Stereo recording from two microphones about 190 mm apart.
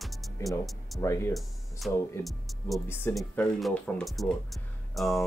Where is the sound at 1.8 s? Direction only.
Centre (ahead or behind).